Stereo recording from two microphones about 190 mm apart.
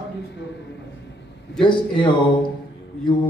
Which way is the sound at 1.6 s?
25° left (ahead or behind).